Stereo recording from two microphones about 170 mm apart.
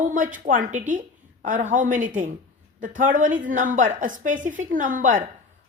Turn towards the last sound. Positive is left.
turn(degrees=-50)  # may be behind; listen again after turning